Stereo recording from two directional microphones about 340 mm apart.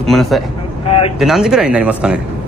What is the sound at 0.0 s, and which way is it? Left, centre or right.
Speech, centre.